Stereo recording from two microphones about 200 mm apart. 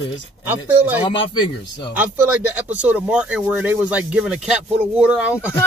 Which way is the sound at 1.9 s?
10° right (ahead or behind).